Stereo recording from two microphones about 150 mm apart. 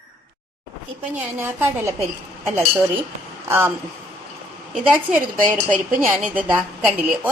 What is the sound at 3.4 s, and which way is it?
Speech, 15° right (ahead or behind).